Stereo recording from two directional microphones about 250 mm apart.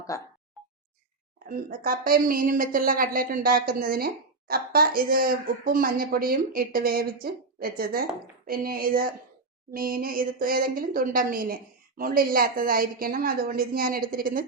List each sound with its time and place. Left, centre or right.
0.1 s speech: centre
1.5 s a woman's voice: right